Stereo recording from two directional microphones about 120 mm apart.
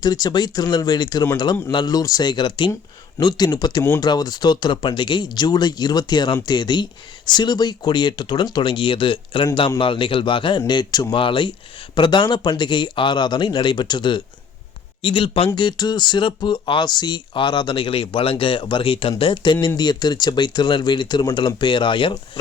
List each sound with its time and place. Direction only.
0.0 s speech: 35° left (ahead or behind)